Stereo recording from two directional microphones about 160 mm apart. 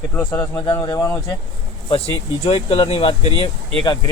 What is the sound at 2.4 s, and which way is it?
Speech, 35° left (ahead or behind).